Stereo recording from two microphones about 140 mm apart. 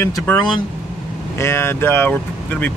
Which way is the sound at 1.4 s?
20° left (ahead or behind).